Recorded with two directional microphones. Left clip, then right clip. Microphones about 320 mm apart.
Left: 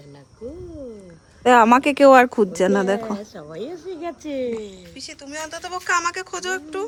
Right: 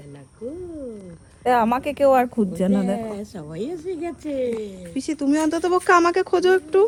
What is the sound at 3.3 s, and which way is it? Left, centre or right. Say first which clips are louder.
Speech: right 2 dB; right.